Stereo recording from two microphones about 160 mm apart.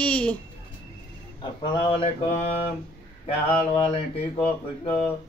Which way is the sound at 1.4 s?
30° left (ahead or behind).